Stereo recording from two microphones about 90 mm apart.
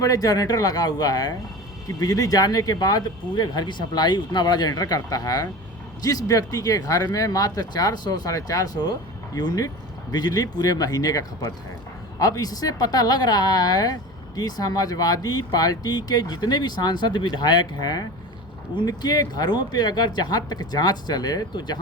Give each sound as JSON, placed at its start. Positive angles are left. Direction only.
{"t": 0.0, "sound": "speech", "side_deg": 45}